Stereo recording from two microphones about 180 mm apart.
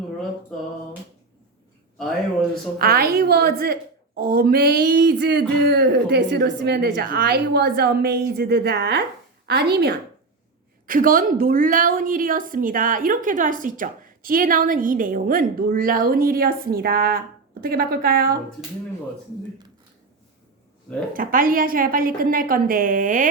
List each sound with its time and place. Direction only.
2.7 s a woman's voice: 55° right (ahead or behind)
10.8 s a woman's voice: 50° right (ahead or behind)
21.1 s a woman's voice: 50° right (ahead or behind)